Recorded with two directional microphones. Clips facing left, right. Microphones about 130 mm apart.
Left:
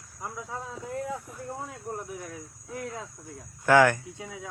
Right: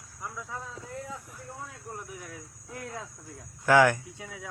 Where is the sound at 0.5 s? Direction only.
25° left (ahead or behind).